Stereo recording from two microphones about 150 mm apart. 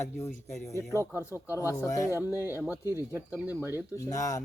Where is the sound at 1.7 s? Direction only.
20° left (ahead or behind).